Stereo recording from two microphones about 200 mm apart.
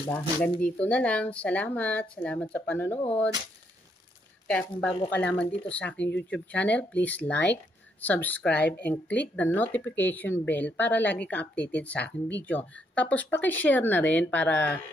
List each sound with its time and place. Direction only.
0.1 s speech: 5° left (ahead or behind)
4.5 s speech: 5° left (ahead or behind)